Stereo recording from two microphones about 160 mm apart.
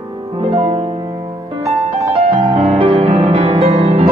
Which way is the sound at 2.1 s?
40° right (ahead or behind).